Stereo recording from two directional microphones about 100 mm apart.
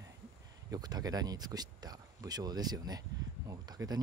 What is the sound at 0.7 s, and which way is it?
Speech, 40° right (ahead or behind).